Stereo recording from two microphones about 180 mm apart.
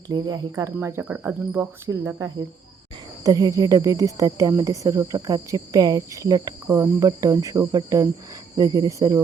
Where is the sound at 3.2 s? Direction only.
20° right (ahead or behind).